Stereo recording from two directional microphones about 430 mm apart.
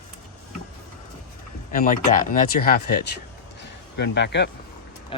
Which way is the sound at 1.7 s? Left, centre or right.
Centre.